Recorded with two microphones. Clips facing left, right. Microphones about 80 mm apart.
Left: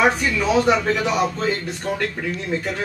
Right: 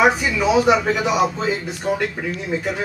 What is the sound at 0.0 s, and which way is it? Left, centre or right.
A man's voice, centre.